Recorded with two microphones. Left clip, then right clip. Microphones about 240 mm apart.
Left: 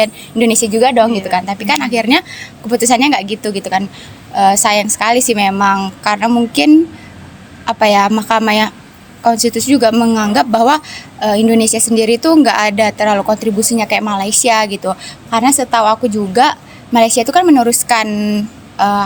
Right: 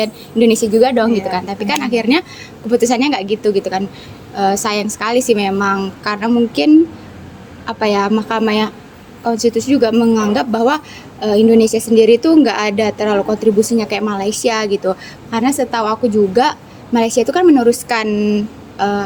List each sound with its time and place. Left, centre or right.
0.0 s a woman's voice: left